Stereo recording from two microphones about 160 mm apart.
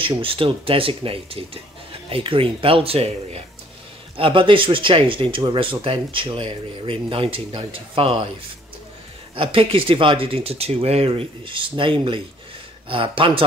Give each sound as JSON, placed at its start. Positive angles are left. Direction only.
{"t": 0.0, "sound": "speech", "side_deg": -35}
{"t": 9.3, "sound": "speech", "side_deg": -35}